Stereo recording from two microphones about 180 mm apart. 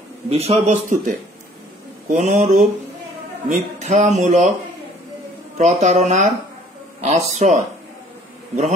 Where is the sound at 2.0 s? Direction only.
40° right (ahead or behind).